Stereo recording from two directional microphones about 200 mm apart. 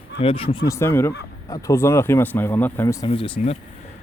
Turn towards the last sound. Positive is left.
turn(degrees=30)  # may be behind; listen again after turning